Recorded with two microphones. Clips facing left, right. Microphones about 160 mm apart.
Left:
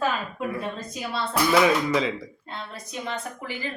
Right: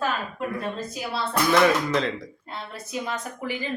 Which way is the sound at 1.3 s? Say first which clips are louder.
Even; 5° left (ahead or behind).